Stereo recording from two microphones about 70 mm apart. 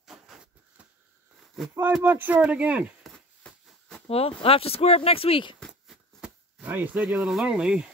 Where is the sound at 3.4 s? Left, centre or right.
Centre.